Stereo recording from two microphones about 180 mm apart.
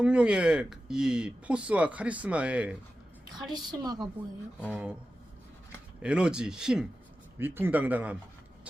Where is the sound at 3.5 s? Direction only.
20° right (ahead or behind).